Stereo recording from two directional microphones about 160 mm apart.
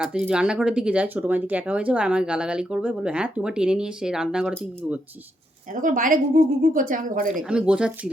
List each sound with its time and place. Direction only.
0.0 s speech: 5° right (ahead or behind)
5.7 s speech: 60° right (ahead or behind)
7.4 s speech: 5° right (ahead or behind)